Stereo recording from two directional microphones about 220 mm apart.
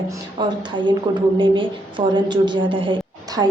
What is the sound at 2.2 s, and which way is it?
Speech, 20° right (ahead or behind).